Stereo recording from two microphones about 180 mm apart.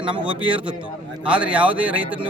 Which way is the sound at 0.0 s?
30° right (ahead or behind).